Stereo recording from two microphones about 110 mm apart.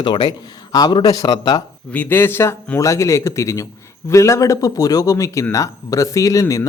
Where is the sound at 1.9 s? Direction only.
15° left (ahead or behind).